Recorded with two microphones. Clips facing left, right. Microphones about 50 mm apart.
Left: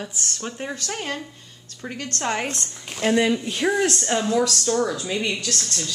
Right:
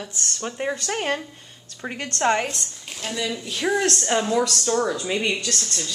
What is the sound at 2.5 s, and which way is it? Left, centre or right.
Speech, left.